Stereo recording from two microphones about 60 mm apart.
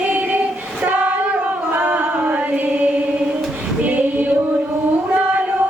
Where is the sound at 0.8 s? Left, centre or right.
Right.